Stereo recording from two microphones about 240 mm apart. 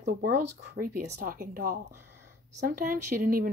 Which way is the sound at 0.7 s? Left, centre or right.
Right.